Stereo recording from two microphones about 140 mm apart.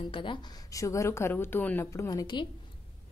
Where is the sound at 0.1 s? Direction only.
35° left (ahead or behind).